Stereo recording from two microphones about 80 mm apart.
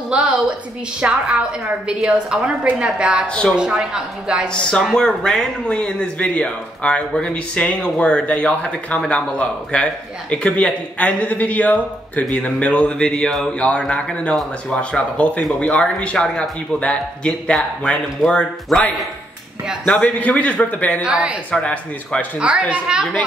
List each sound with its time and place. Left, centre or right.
0.1 s a woman's voice: centre
3.3 s speech: centre
3.5 s a woman's voice: centre
4.5 s speech: centre
20.2 s a man's voice: centre
21.0 s a woman's voice: centre
21.5 s speech: centre
22.4 s a woman's voice: centre